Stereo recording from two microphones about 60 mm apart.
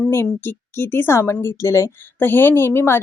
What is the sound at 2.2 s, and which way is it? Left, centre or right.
Speech, left.